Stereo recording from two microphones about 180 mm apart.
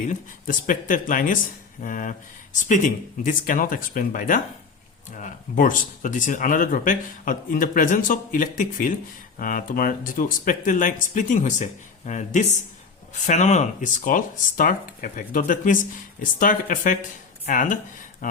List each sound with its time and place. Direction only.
0.1 s speech: 45° left (ahead or behind)